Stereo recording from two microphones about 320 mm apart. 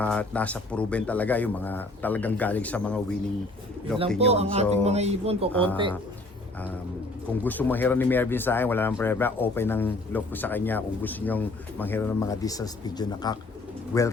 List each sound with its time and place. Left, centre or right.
0.0 s speech: centre
4.3 s speech: centre
7.4 s speech: centre